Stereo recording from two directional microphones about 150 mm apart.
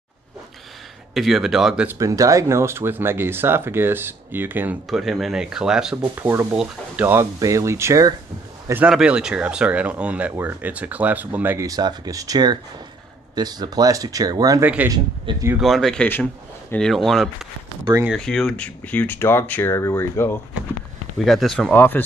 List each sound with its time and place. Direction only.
1.1 s speech: centre (ahead or behind)
1.9 s speech: 20° right (ahead or behind)
4.8 s speech: centre (ahead or behind)
6.1 s speech: 15° right (ahead or behind)
8.8 s speech: 5° right (ahead or behind); by 14.6 s 25° right (ahead or behind)
14.6 s speech: 10° right (ahead or behind)
15.3 s speech: 35° right (ahead or behind)
15.6 s speech: centre (ahead or behind); by 20.3 s 20° left (ahead or behind)
21.2 s speech: centre (ahead or behind)
21.7 s speech: 15° left (ahead or behind)